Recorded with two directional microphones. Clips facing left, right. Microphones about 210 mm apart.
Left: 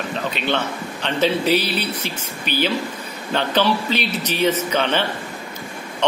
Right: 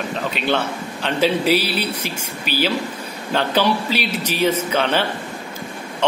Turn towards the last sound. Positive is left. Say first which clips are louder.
# even
turn(degrees=-5)  # may be behind; listen again after turning